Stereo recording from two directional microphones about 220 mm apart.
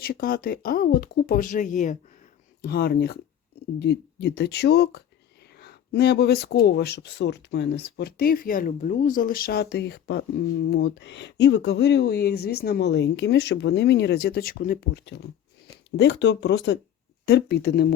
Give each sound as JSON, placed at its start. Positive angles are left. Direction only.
{"t": 0.0, "sound": "speech", "side_deg": 40}